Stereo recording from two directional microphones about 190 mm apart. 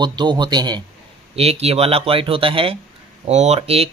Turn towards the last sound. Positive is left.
turn(degrees=-35)  # may be behind; listen again after turning